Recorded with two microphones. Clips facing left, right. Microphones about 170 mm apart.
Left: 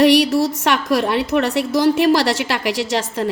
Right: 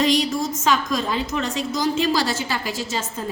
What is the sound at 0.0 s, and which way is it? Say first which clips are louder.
A woman's voice: left 7 dB; 70° left (ahead or behind).